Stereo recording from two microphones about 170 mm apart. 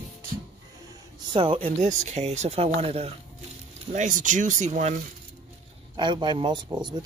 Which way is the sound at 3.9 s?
45° right (ahead or behind).